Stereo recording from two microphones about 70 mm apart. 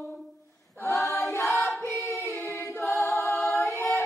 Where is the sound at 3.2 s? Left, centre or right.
Centre.